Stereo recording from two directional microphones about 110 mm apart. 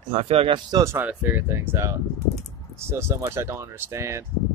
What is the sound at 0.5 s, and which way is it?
Speech, 40° right (ahead or behind).